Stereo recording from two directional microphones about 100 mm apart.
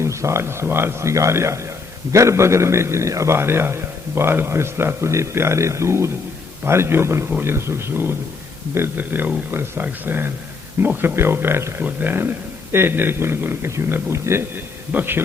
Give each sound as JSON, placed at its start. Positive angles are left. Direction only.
{"t": 0.0, "sound": "a man's voice", "side_deg": -30}